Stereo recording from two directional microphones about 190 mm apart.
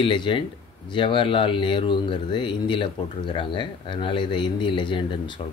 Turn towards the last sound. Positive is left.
turn(degrees=25)  # may be behind; listen again after turning